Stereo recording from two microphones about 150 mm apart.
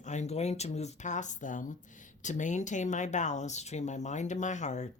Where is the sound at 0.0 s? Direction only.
50° left (ahead or behind).